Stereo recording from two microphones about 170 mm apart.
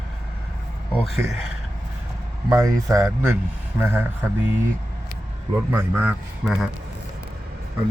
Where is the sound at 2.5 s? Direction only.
20° right (ahead or behind).